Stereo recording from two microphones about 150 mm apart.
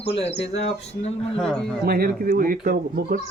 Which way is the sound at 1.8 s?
75° right (ahead or behind).